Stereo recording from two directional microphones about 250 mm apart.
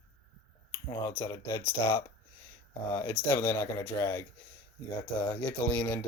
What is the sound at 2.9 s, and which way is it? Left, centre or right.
Speech, centre.